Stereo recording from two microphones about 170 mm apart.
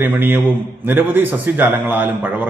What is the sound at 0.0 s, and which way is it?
A man's voice, 10° right (ahead or behind).